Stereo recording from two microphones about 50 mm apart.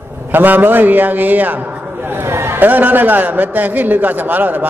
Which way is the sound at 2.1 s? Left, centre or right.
Right.